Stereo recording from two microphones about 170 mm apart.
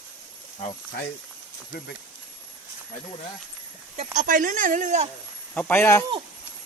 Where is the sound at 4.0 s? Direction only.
50° right (ahead or behind).